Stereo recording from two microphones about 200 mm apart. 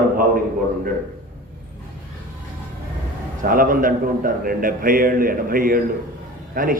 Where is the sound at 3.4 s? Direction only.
45° right (ahead or behind).